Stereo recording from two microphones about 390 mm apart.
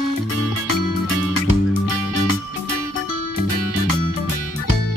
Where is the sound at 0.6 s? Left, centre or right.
Left.